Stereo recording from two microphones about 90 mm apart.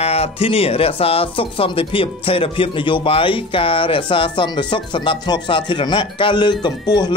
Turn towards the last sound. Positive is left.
turn(degrees=55)  # may be behind; listen again after turning